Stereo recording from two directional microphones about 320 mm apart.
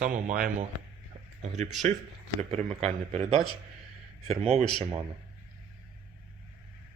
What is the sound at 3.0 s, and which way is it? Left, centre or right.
Speech, centre.